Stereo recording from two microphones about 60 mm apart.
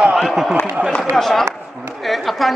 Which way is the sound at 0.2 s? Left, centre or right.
Centre.